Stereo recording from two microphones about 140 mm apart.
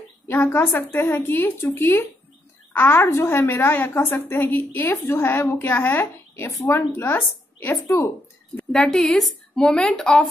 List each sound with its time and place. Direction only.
0.3 s a woman's voice: 15° left (ahead or behind)
8.5 s speech: 5° left (ahead or behind)